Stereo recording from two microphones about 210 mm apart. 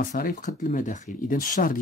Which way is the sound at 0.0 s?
45° left (ahead or behind).